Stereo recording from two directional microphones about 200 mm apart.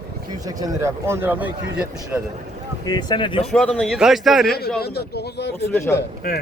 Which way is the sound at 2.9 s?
20° left (ahead or behind).